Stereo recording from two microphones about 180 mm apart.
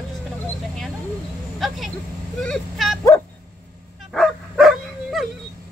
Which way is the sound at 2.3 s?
5° left (ahead or behind).